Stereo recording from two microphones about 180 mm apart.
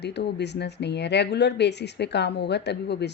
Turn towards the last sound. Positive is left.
turn(degrees=70)  # may be behind; listen again after turning